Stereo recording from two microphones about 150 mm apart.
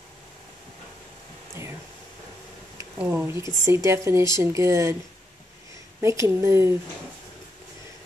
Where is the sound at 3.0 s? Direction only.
10° right (ahead or behind).